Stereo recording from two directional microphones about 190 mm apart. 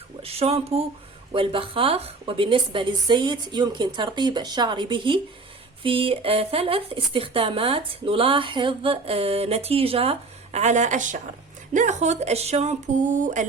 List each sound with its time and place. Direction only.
0.2 s speech: 30° right (ahead or behind)